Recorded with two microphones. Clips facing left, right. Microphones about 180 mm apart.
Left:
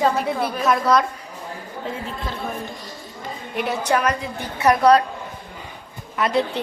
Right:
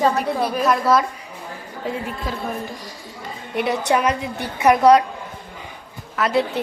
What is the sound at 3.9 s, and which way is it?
A woman's voice, 15° right (ahead or behind).